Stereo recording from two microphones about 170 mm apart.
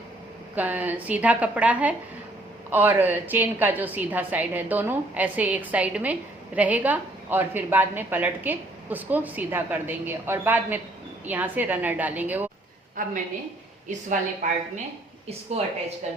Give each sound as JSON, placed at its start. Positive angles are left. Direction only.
{"t": 0.5, "sound": "a woman's voice", "side_deg": -10}
{"t": 13.0, "sound": "a woman's voice", "side_deg": -50}
{"t": 14.4, "sound": "a woman's voice", "side_deg": -50}
{"t": 15.3, "sound": "a woman's voice", "side_deg": -35}